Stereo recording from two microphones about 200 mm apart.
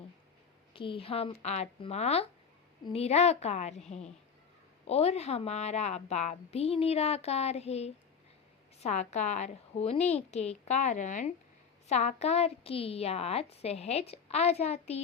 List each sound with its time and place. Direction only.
0.7 s a woman's voice: 25° left (ahead or behind)